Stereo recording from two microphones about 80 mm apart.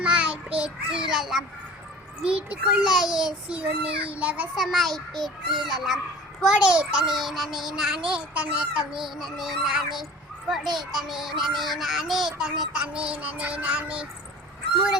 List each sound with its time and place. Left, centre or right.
0.0 s child singing: centre
2.2 s a child's voice: centre
4.5 s a child's voice: centre